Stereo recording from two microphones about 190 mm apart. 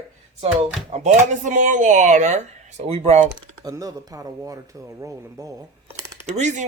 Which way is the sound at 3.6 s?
20° right (ahead or behind).